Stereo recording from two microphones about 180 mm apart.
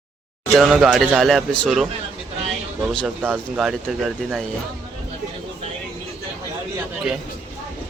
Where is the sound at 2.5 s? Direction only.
5° left (ahead or behind).